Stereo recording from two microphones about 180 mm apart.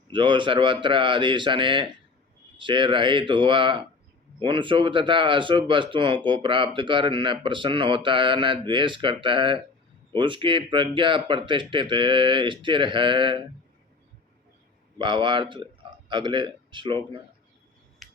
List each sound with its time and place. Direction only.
0.1 s speech: 25° right (ahead or behind)
14.9 s a man's voice: 25° right (ahead or behind)
18.0 s a sound: centre (ahead or behind)